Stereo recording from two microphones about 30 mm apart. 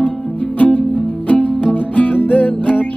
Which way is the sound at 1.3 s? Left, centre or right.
Left.